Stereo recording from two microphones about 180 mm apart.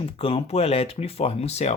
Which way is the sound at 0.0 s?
30° left (ahead or behind).